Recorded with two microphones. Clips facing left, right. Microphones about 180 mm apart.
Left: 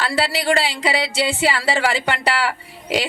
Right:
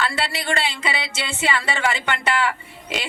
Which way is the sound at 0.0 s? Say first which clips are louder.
Left 4 dB; 35° left (ahead or behind).